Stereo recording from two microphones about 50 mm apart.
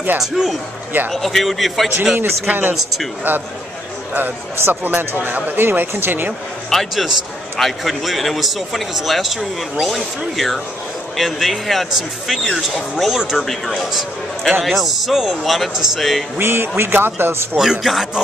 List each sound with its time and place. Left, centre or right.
0.2 s a man's voice: centre
2.4 s speech: right
4.6 s speech: right
6.7 s a man's voice: centre
13.5 s a man's voice: centre
15.7 s speech: centre
16.0 s a man's voice: centre
16.3 s speech: right
17.6 s speech: centre